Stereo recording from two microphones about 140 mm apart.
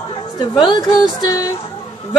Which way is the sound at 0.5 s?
30° left (ahead or behind).